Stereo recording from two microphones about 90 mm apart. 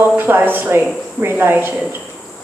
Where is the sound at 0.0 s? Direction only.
25° right (ahead or behind).